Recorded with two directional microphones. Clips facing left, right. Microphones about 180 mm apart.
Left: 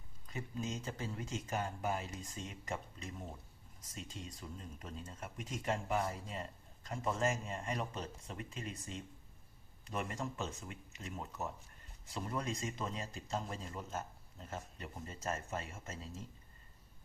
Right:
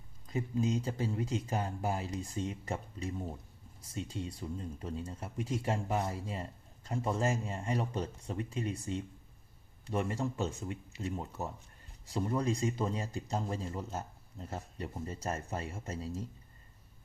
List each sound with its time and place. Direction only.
0.3 s speech: 30° right (ahead or behind)